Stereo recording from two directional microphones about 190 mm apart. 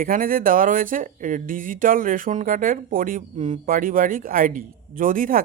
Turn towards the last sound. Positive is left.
turn(degrees=-45)  # may be behind; listen again after turning